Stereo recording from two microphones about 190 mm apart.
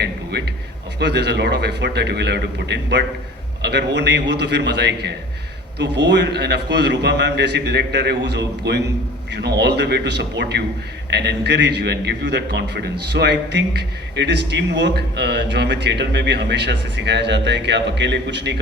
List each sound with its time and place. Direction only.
0.0 s a man's voice: 60° right (ahead or behind)